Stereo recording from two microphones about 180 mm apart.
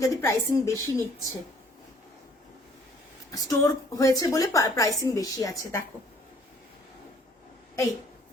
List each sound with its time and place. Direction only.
0.0 s a woman's voice: 15° left (ahead or behind)
3.3 s a woman's voice: 20° left (ahead or behind)